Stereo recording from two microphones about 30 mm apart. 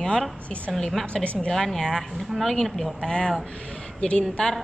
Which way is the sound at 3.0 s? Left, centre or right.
Left.